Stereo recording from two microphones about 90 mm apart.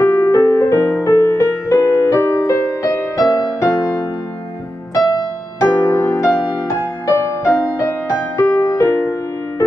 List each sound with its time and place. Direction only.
0.0 s music: 30° left (ahead or behind); by 5.2 s 50° left (ahead or behind)
5.9 s music: 30° left (ahead or behind)